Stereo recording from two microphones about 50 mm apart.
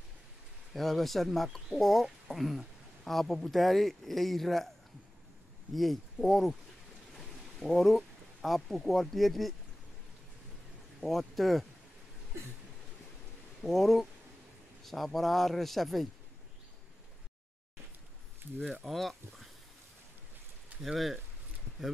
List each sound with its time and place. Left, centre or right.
0.7 s speech: centre
5.8 s speech: centre
7.6 s speech: centre
11.0 s speech: centre
13.6 s speech: centre
18.9 s speech: centre
20.8 s speech: centre